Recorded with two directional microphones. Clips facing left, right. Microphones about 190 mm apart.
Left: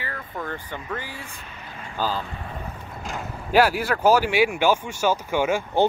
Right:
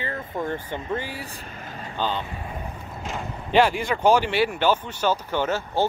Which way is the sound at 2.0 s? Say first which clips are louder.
Even; 5° left (ahead or behind).